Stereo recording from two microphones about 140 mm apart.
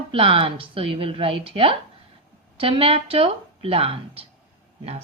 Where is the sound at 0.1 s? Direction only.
40° right (ahead or behind).